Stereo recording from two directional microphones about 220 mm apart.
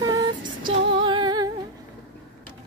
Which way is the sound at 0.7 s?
20° right (ahead or behind).